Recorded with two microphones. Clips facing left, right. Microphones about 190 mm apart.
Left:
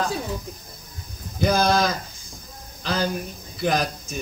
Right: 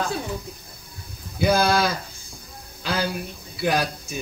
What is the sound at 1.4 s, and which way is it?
Speech, 10° right (ahead or behind).